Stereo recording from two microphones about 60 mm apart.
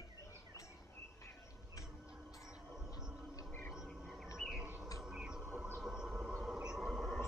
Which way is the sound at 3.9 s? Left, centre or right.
Centre.